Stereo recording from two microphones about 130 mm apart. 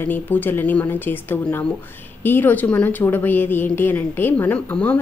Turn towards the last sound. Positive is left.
turn(degrees=10)  # may be behind; listen again after turning